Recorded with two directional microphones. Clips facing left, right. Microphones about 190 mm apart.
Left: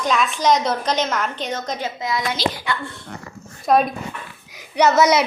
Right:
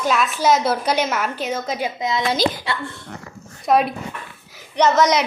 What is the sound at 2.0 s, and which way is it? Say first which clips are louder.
Speech: right 1 dB; 20° right (ahead or behind).